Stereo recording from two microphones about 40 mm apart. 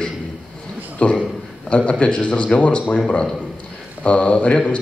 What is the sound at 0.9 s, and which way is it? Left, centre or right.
Speech, left.